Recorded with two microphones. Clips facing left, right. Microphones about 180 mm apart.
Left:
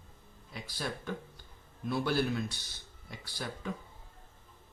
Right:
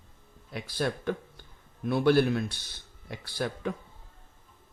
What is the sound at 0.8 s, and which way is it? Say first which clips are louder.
Speech: right 8 dB; 65° right (ahead or behind).